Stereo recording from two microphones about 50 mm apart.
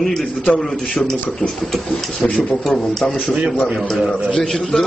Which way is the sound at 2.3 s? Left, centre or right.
Centre.